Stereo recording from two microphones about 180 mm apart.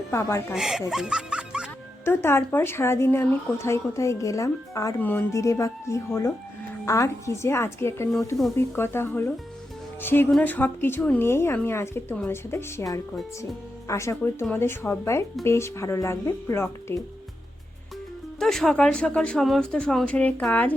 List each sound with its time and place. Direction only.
0.1 s speech: 15° left (ahead or behind)
0.5 s speech: 5° right (ahead or behind)
2.0 s speech: 15° left (ahead or behind)
18.3 s speech: centre (ahead or behind)